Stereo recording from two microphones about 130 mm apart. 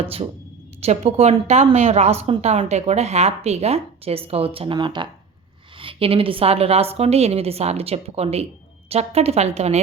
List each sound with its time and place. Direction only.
0.0 s a woman's voice: 45° right (ahead or behind)